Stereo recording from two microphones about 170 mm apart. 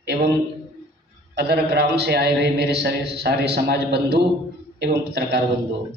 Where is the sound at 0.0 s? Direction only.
75° right (ahead or behind).